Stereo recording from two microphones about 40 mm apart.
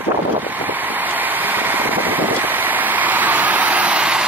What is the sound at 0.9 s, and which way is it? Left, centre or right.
Vehicle, right.